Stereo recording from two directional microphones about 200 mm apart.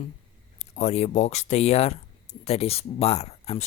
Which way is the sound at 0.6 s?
35° left (ahead or behind).